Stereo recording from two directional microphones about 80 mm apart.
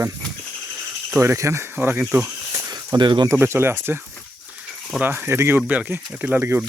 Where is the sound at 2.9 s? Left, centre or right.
Right.